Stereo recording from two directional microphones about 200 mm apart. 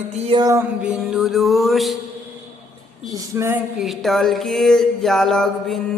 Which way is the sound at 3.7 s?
Centre (ahead or behind).